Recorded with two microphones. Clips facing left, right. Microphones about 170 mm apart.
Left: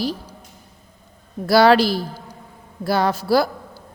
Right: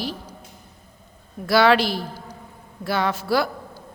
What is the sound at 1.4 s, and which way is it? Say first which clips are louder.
A man's voice: left 4 dB; 35° left (ahead or behind).